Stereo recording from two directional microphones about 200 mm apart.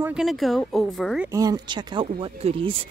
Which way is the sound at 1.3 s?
20° right (ahead or behind).